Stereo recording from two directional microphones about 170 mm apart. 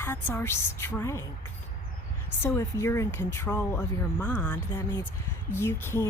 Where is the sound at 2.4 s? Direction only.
15° left (ahead or behind).